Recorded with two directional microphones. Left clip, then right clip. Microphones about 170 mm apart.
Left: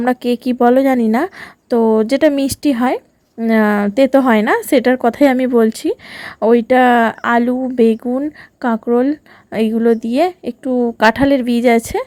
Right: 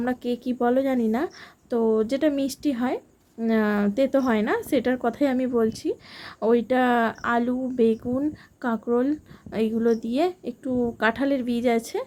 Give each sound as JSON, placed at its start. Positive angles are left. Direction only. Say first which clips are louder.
{"t": 0.0, "sound": "a woman's voice", "louder": "left 11 dB", "side_deg": 45}